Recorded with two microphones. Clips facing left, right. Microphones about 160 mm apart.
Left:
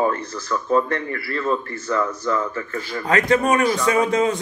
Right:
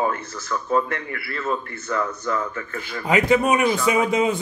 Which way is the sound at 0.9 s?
35° left (ahead or behind).